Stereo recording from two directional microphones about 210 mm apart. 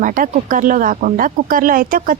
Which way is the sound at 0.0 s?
40° right (ahead or behind).